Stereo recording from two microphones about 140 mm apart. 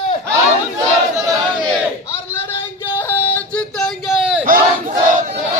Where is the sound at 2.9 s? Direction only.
15° left (ahead or behind); by 4.4 s 5° right (ahead or behind).